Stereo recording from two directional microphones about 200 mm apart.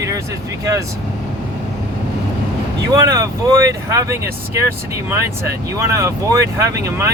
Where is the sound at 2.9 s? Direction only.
15° right (ahead or behind).